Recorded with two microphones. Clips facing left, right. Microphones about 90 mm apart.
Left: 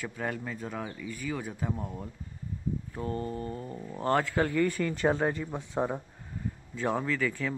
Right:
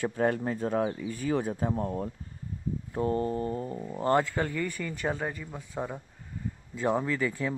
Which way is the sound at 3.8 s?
10° right (ahead or behind).